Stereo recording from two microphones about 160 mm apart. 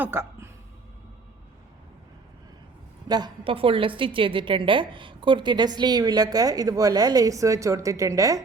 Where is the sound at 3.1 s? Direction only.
25° right (ahead or behind).